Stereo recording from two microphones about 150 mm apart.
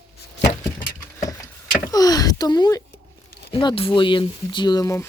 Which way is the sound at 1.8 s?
25° left (ahead or behind).